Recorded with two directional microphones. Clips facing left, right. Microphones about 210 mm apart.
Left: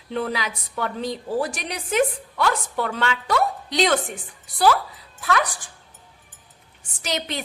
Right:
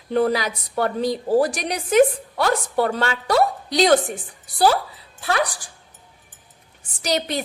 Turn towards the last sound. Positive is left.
turn(degrees=-40)  # may be behind; listen again after turning